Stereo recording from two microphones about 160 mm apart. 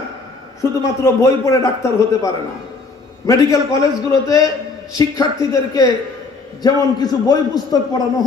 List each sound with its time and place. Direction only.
0.6 s a man's voice: 15° left (ahead or behind)